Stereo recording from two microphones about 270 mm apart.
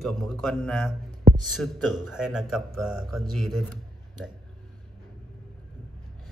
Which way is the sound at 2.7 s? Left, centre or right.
Right.